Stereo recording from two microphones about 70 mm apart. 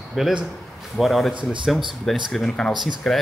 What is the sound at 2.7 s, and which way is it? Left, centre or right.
Speech, right.